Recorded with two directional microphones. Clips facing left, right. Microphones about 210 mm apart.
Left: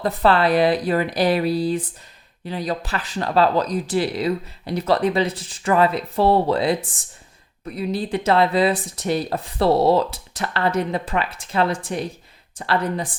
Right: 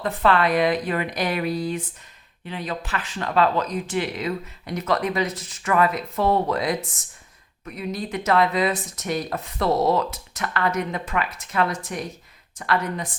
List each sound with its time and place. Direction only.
0.0 s speech: 35° left (ahead or behind)